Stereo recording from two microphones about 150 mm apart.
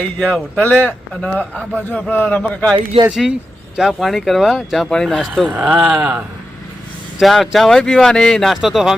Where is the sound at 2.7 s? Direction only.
35° right (ahead or behind).